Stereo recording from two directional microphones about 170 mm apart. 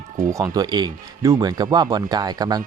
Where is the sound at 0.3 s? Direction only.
20° right (ahead or behind).